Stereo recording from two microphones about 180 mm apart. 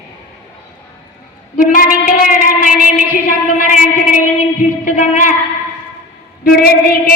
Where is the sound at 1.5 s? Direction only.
50° left (ahead or behind).